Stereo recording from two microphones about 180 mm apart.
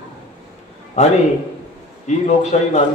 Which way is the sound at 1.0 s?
40° left (ahead or behind).